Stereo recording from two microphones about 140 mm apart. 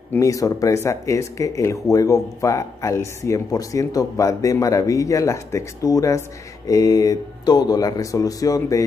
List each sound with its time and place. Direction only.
0.1 s a man's voice: 25° left (ahead or behind)